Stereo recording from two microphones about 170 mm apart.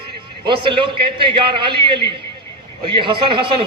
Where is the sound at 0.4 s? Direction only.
30° right (ahead or behind).